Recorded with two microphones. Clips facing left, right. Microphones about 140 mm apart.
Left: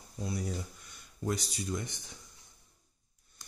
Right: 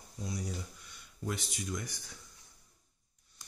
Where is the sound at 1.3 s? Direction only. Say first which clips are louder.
Left 4 dB; 35° left (ahead or behind).